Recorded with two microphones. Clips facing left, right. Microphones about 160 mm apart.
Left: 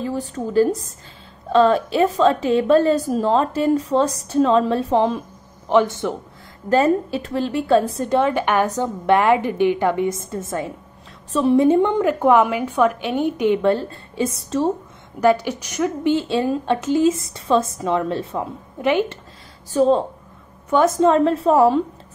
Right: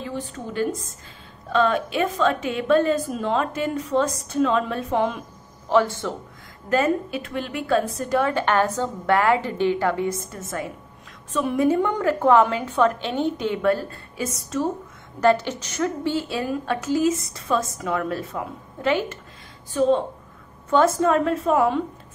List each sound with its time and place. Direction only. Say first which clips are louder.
0.0 s a woman's voice: left 6 dB; 35° left (ahead or behind)
5.7 s a woman's voice: left 3 dB; 20° left (ahead or behind)
6.7 s a woman's voice: left 4 dB; 30° left (ahead or behind)
15.1 s a woman's voice: left 2 dB; 10° left (ahead or behind); by 18.4 s 25° left (ahead or behind)
18.8 s a woman's voice: left 4 dB; 15° left (ahead or behind)
19.7 s a woman's voice: left 3 dB; 35° left (ahead or behind)
20.7 s a woman's voice: left 3 dB; 20° left (ahead or behind)